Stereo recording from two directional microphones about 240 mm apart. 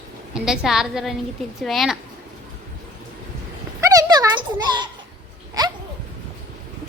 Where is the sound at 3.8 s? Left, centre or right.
Centre.